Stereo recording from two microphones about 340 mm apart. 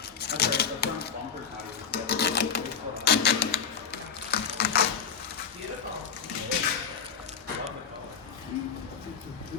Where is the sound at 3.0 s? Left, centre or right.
Left.